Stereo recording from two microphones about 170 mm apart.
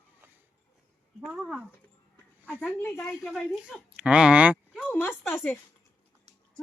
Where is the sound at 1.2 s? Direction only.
Centre (ahead or behind).